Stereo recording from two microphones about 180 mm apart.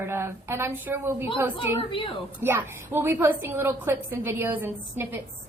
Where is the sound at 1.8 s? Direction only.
30° left (ahead or behind).